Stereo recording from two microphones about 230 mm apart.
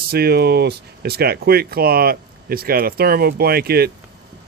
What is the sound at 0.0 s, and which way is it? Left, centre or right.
Speech, right.